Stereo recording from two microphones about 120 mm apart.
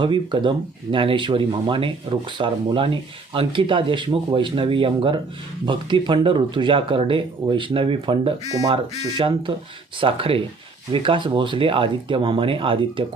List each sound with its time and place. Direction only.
0.0 s speech: 40° right (ahead or behind)
8.4 s speech: 30° right (ahead or behind)
8.7 s speech: 45° right (ahead or behind)